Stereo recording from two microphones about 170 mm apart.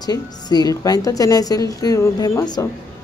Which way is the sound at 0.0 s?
25° left (ahead or behind).